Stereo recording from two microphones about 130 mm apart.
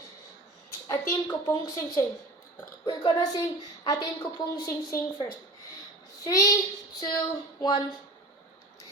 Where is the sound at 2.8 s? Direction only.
35° left (ahead or behind).